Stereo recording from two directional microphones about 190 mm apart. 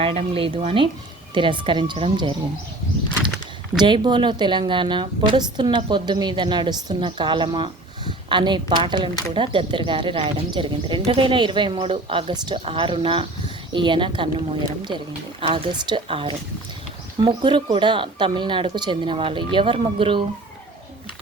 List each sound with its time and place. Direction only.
0.0 s a woman's voice: 30° right (ahead or behind)
3.8 s a woman's voice: 25° right (ahead or behind)